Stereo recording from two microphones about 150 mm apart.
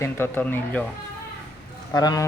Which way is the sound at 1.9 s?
25° left (ahead or behind).